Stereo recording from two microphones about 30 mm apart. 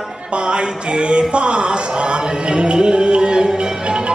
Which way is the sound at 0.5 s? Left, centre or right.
Right.